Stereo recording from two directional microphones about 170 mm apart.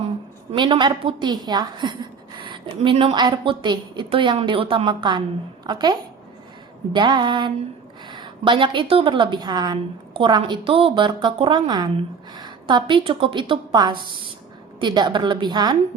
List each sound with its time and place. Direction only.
0.5 s a woman's voice: 25° right (ahead or behind)